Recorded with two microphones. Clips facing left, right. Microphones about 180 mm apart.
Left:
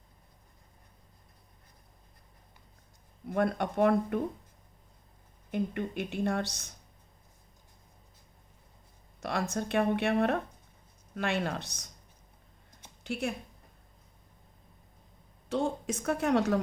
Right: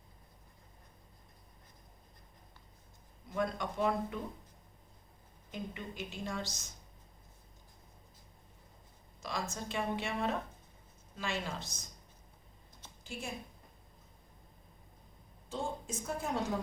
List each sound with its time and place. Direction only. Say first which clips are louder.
3.2 s speech: left 6 dB; 60° left (ahead or behind)
5.5 s speech: left 10 dB; 60° left (ahead or behind)
9.2 s speech: left 7 dB; 60° left (ahead or behind)
13.1 s a woman's voice: left 10 dB; 70° left (ahead or behind)
15.4 s a woman's voice: left 8 dB; 75° left (ahead or behind)